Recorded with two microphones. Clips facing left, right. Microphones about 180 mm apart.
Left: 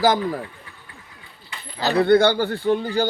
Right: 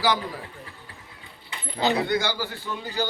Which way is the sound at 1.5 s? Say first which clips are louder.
Left 1 dB; 20° right (ahead or behind).